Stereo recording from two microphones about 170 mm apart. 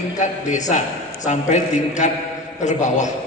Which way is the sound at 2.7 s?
45° left (ahead or behind).